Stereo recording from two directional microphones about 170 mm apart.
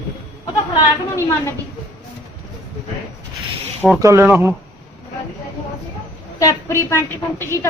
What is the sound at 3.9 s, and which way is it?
Speech, 15° right (ahead or behind).